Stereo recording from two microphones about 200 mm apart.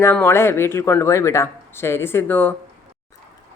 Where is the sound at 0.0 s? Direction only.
10° left (ahead or behind).